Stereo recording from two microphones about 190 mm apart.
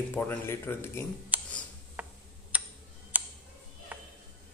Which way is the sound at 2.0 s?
5° right (ahead or behind).